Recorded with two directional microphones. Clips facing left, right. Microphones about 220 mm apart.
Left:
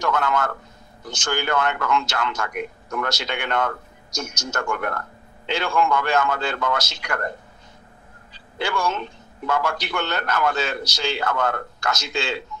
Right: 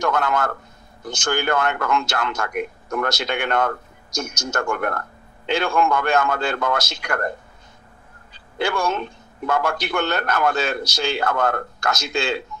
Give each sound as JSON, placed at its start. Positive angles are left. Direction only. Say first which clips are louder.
{"t": 0.0, "sound": "speech", "louder": "right 1 dB", "side_deg": -50}
{"t": 8.3, "sound": "speech", "louder": "right 3 dB", "side_deg": -50}